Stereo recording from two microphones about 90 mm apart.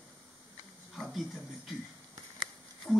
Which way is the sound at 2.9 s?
5° left (ahead or behind).